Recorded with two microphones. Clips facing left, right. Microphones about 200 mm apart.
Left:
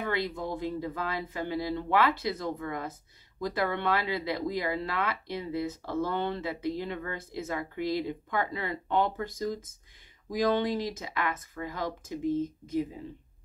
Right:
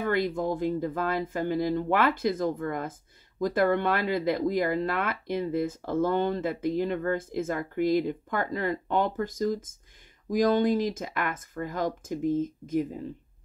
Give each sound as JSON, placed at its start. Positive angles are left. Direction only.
{"t": 0.0, "sound": "speech", "side_deg": -50}